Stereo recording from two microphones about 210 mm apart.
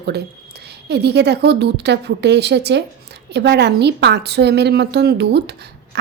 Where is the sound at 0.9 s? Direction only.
55° right (ahead or behind).